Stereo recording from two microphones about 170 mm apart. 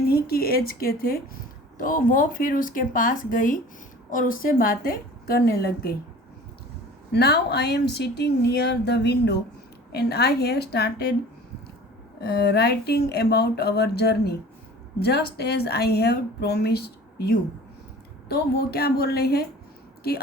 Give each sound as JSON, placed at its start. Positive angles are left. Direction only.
{"t": 0.1, "sound": "a woman's voice", "side_deg": 65}
{"t": 7.1, "sound": "speech", "side_deg": 75}
{"t": 12.2, "sound": "speech", "side_deg": 75}
{"t": 18.3, "sound": "speech", "side_deg": 70}